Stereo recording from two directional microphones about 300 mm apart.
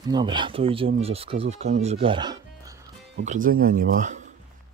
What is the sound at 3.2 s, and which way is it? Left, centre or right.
Speech, right.